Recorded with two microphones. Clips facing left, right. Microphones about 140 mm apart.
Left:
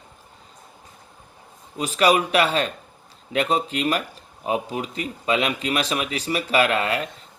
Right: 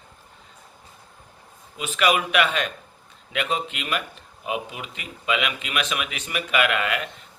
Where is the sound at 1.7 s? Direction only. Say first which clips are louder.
Left 3 dB; 35° left (ahead or behind).